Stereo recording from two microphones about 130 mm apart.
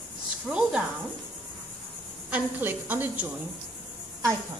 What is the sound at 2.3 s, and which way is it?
A woman's voice, 15° right (ahead or behind).